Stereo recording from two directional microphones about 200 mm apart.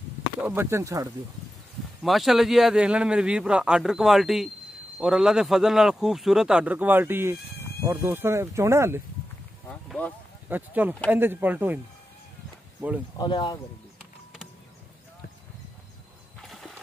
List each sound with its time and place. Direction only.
0.4 s speech: 10° right (ahead or behind)
2.0 s speech: centre (ahead or behind)
9.7 s a sound: 5° left (ahead or behind)
10.5 s speech: 10° right (ahead or behind)
13.2 s speech: 20° left (ahead or behind)
16.4 s a sound: centre (ahead or behind)